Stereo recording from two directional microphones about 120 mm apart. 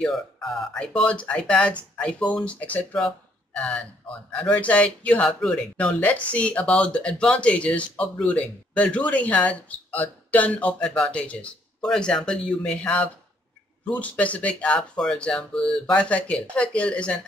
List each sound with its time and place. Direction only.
0.0 s speech: centre (ahead or behind)